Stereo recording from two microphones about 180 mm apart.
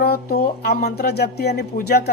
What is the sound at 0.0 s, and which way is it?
Speech, 60° left (ahead or behind).